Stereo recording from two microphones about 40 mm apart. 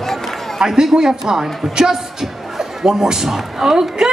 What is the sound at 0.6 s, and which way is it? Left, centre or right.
A man's voice, centre.